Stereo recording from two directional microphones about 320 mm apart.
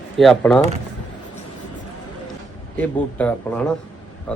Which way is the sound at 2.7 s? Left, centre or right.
Centre.